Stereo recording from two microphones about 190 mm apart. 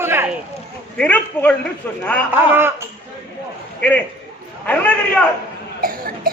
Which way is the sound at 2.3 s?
10° right (ahead or behind).